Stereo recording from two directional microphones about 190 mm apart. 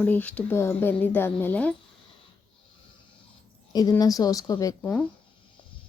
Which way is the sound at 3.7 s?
20° left (ahead or behind).